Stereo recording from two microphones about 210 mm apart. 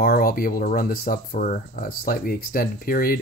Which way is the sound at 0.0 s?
45° left (ahead or behind).